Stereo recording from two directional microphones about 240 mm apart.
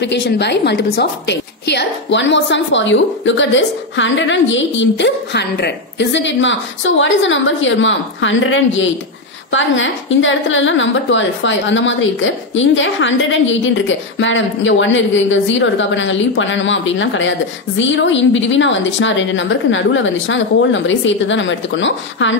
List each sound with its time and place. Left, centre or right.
0.0 s a woman's voice: left